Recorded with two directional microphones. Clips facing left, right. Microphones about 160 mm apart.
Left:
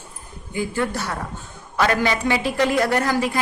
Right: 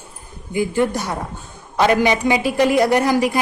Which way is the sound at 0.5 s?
15° right (ahead or behind).